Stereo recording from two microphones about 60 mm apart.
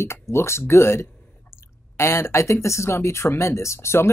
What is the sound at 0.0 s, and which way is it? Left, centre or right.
Speech, left.